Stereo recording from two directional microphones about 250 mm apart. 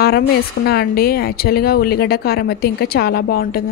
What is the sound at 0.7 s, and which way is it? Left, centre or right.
Speech, left.